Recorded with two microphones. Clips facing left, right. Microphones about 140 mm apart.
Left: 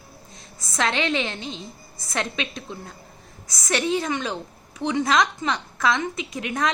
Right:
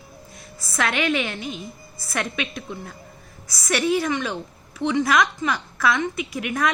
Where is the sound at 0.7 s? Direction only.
25° left (ahead or behind).